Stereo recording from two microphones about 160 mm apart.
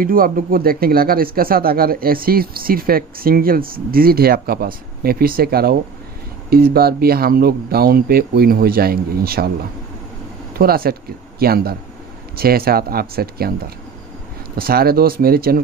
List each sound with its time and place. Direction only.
0.0 s speech: 65° right (ahead or behind)
10.6 s speech: 70° right (ahead or behind)
14.6 s speech: 70° right (ahead or behind)